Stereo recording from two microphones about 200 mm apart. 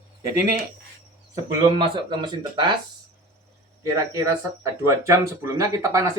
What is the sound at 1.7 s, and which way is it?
Speech, 25° right (ahead or behind).